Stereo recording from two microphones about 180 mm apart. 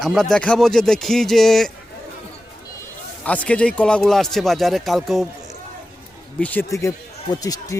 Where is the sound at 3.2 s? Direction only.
10° left (ahead or behind).